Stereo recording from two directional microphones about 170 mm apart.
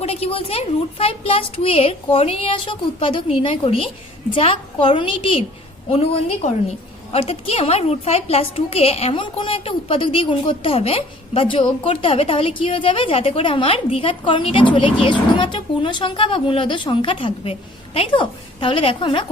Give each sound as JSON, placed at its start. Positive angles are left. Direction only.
{"t": 0.0, "sound": "a woman's voice", "side_deg": 35}